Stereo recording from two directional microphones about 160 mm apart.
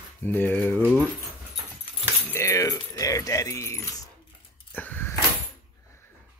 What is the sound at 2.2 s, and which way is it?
Keys jangling, 15° left (ahead or behind).